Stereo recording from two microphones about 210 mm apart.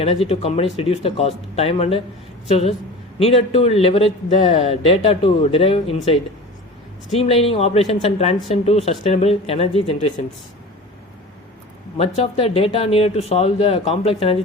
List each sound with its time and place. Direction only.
0.0 s a man's voice: 30° left (ahead or behind)
7.2 s a man's voice: 25° left (ahead or behind)
11.9 s a man's voice: 25° left (ahead or behind)